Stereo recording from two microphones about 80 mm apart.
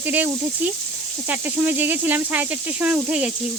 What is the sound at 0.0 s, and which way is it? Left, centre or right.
Speech, right.